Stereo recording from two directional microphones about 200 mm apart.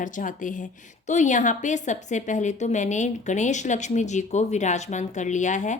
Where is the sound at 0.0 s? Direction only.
40° left (ahead or behind).